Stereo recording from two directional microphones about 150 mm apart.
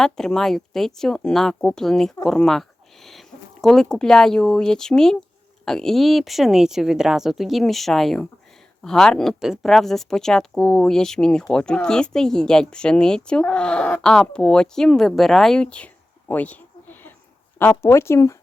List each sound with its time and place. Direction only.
0.0 s speech: 5° left (ahead or behind)
16.3 s a sound: 10° left (ahead or behind)
17.6 s speech: 15° left (ahead or behind)